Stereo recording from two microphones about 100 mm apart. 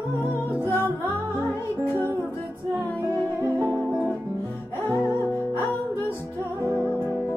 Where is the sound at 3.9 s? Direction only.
5° right (ahead or behind).